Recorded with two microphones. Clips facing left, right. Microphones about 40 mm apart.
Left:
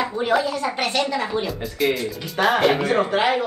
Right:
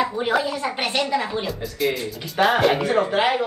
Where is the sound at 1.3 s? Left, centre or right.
Centre.